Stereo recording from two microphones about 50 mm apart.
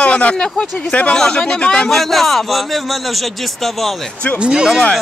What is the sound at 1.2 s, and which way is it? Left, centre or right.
Speech, centre.